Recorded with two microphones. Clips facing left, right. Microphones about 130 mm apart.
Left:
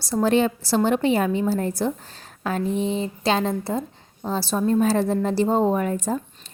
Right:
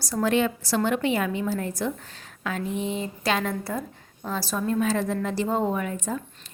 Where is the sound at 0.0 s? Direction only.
30° left (ahead or behind).